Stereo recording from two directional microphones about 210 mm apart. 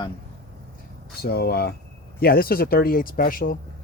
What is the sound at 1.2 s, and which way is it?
Speech, 50° left (ahead or behind).